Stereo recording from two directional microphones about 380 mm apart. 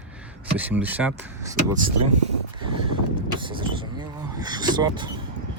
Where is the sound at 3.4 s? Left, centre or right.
Centre.